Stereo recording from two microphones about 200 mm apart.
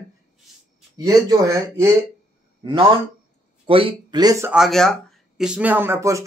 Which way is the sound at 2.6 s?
25° right (ahead or behind).